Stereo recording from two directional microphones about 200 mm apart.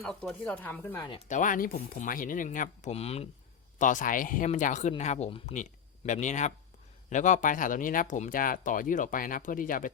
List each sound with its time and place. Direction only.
0.0 s speech: centre (ahead or behind)
1.1 s speech: 40° left (ahead or behind)